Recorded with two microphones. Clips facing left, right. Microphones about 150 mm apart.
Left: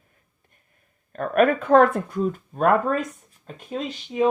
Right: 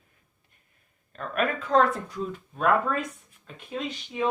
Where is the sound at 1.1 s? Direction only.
50° left (ahead or behind).